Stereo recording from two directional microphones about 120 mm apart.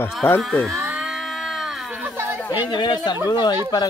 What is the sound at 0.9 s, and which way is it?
Sheep, centre (ahead or behind).